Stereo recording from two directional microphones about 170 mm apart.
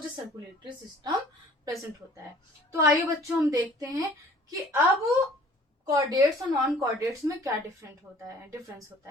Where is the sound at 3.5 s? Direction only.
20° right (ahead or behind).